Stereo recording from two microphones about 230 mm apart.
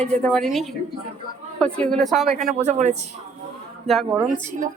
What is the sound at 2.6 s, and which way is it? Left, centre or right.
Speech, right.